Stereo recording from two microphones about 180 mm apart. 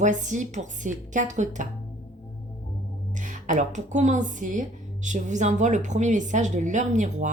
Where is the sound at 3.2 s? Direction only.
45° right (ahead or behind).